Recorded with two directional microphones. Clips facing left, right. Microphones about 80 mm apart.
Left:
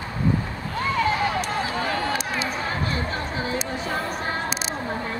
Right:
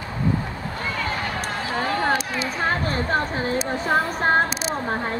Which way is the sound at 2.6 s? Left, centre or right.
Right.